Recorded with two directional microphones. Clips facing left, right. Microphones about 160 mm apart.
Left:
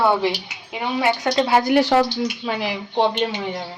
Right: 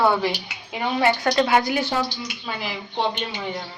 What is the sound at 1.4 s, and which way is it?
Speech, 30° left (ahead or behind).